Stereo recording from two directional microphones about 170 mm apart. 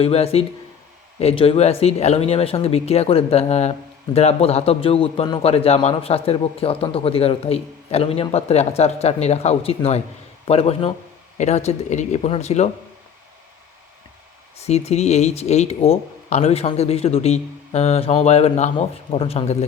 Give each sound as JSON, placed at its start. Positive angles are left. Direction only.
{"t": 0.0, "sound": "speech", "side_deg": 35}
{"t": 14.7, "sound": "speech", "side_deg": 40}